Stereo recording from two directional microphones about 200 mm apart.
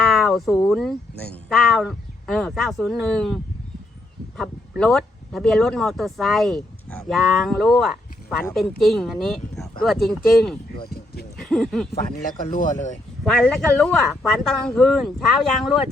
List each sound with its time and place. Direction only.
0.0 s a sound: centre (ahead or behind)
0.7 s speech: centre (ahead or behind)
10.8 s speech: 50° left (ahead or behind)
11.4 s speech: centre (ahead or behind)
12.2 s speech: 40° left (ahead or behind)
13.2 s speech: 5° left (ahead or behind)